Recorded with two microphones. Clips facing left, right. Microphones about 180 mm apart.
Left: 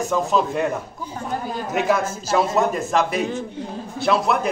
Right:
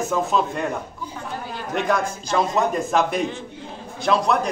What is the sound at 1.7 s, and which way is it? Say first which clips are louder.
A man's voice: left 1 dB; 5° left (ahead or behind).